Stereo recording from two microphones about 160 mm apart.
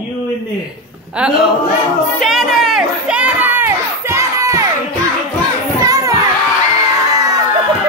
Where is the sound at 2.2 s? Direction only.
Centre (ahead or behind); by 4.6 s 20° right (ahead or behind).